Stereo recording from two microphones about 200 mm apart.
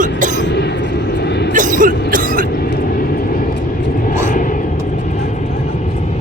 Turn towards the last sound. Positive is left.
turn(degrees=35)  # may be behind; listen again after turning